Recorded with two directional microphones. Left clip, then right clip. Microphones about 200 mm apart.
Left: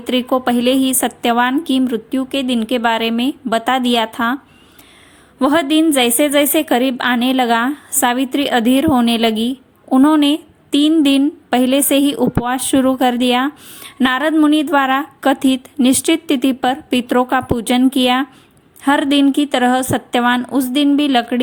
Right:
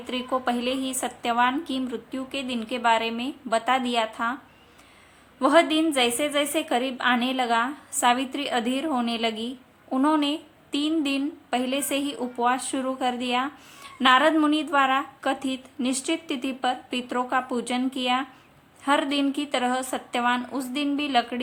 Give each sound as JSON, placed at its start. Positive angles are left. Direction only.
{"t": 0.0, "sound": "speech", "side_deg": 40}
{"t": 5.4, "sound": "speech", "side_deg": 40}